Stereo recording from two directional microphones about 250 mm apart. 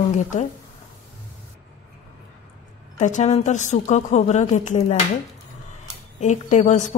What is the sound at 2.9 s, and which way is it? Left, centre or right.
A woman's voice, left.